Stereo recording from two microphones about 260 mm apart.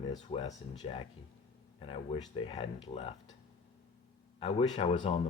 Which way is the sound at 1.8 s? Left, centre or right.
Left.